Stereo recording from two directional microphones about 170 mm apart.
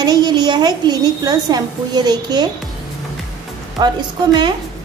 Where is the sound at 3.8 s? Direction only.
25° right (ahead or behind).